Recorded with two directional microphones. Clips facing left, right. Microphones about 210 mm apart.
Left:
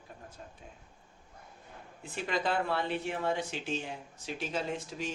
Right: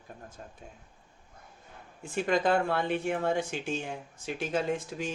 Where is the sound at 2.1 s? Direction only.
50° right (ahead or behind).